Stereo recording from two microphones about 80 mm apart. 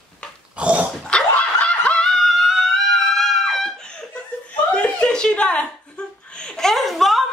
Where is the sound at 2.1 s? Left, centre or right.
Centre.